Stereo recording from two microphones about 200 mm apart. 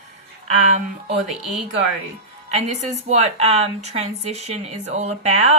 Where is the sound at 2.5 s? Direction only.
35° right (ahead or behind).